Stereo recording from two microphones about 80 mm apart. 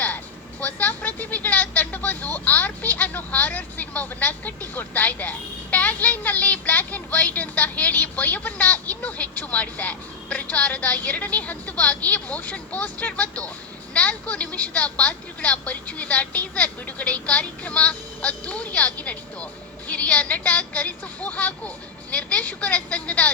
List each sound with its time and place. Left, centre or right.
0.6 s a woman's voice: left